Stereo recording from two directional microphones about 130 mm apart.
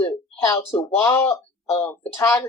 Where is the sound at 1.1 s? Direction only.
15° left (ahead or behind).